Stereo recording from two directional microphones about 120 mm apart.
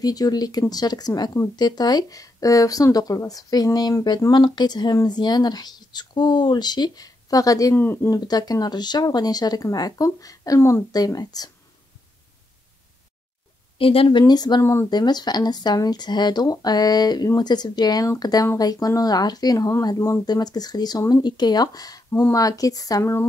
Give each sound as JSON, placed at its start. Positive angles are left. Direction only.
{"t": 0.0, "sound": "speech", "side_deg": 30}
{"t": 7.7, "sound": "speech", "side_deg": 15}
{"t": 8.1, "sound": "speech", "side_deg": 35}
{"t": 13.7, "sound": "speech", "side_deg": 50}
{"t": 14.6, "sound": "speech", "side_deg": 20}
{"t": 14.9, "sound": "speech", "side_deg": 35}